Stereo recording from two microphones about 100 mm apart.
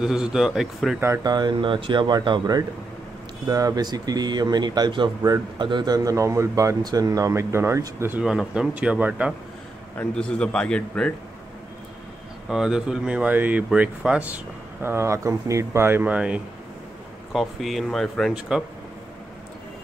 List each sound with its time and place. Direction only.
0.0 s speech: 5° right (ahead or behind)
1.2 s speech: 45° right (ahead or behind); by 8.2 s 25° right (ahead or behind)
8.2 s speech: 5° right (ahead or behind)
9.9 s a man's voice: 10° left (ahead or behind)
12.4 s speech: 5° right (ahead or behind)
17.3 s speech: centre (ahead or behind)